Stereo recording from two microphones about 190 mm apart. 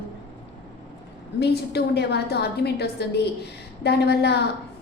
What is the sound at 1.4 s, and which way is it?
A woman's voice, 60° left (ahead or behind).